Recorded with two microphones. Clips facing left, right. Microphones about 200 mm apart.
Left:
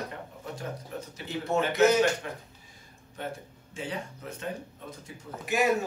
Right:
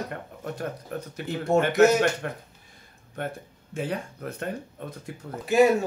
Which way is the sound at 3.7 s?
55° right (ahead or behind).